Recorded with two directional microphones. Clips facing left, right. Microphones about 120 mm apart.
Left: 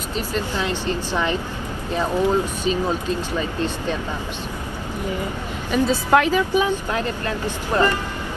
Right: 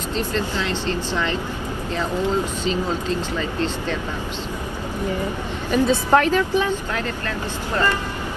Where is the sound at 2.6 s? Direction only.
15° left (ahead or behind).